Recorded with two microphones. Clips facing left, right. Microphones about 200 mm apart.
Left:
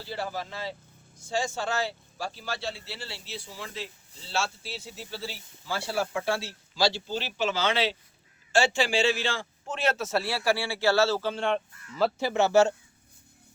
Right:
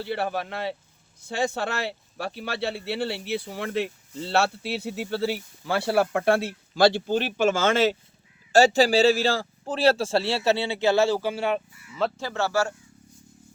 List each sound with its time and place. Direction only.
0.0 s a man's voice: 65° right (ahead or behind); by 11.9 s 10° right (ahead or behind)
12.2 s speech: 15° left (ahead or behind)